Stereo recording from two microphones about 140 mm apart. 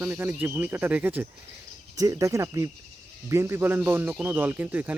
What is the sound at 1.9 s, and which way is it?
Speech, 25° right (ahead or behind).